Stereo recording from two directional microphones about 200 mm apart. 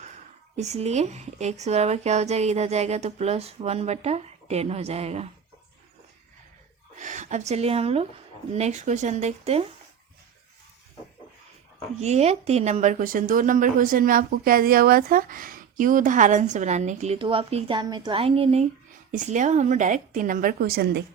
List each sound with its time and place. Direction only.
0.5 s a woman's voice: 35° right (ahead or behind)
6.9 s a woman's voice: 40° right (ahead or behind)
11.9 s a woman's voice: 35° right (ahead or behind); by 21.0 s 50° right (ahead or behind)